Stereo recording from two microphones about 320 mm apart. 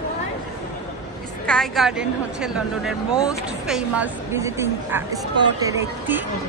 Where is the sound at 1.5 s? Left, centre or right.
Centre.